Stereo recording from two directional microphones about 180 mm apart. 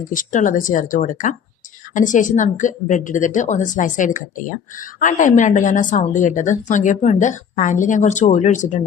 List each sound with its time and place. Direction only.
0.1 s a woman's voice: 45° left (ahead or behind)